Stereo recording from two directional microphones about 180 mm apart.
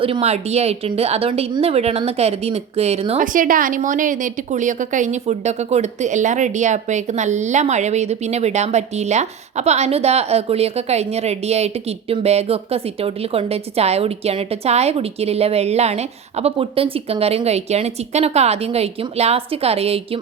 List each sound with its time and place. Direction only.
0.0 s a woman's voice: 35° right (ahead or behind)
3.2 s a woman's voice: 50° right (ahead or behind)